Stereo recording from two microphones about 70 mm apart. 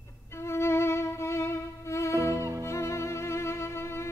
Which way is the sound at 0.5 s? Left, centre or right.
Left.